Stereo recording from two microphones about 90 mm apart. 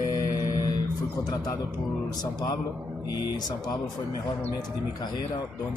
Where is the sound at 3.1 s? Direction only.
50° left (ahead or behind).